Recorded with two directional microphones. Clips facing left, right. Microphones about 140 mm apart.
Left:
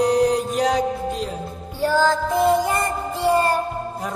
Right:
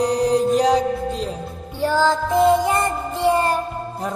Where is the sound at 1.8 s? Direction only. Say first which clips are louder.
Even; 25° right (ahead or behind).